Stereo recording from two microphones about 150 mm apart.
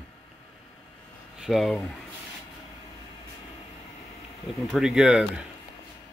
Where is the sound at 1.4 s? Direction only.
Centre (ahead or behind).